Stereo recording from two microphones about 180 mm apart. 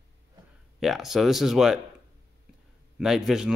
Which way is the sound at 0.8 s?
Centre (ahead or behind).